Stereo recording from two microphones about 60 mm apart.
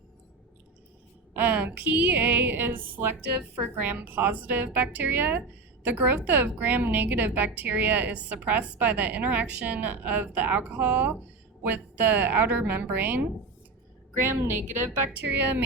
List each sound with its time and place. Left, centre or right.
1.3 s a woman's voice: right
14.8 s speech: right